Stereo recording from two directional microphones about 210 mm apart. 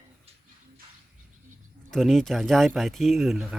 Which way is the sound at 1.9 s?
Centre (ahead or behind).